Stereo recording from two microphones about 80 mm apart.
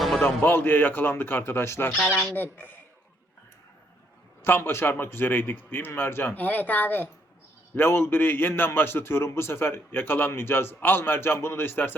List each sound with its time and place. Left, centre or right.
0.2 s a man's voice: left
4.4 s a man's voice: left